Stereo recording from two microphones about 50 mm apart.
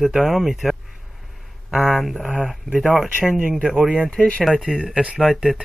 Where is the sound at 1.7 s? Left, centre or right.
Centre.